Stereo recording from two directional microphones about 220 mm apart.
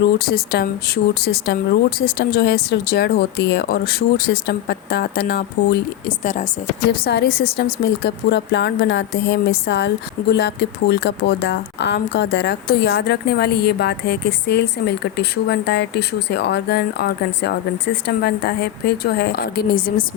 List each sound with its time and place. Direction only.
0.2 s speech: 45° left (ahead or behind)
6.1 s a woman's voice: 35° left (ahead or behind)
7.0 s speech: 45° left (ahead or behind)